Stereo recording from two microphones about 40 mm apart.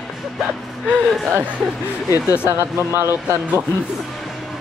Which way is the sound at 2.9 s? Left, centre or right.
Right.